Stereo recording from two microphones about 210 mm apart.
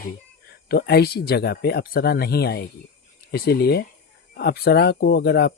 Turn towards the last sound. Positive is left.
turn(degrees=50)  # may be behind; listen again after turning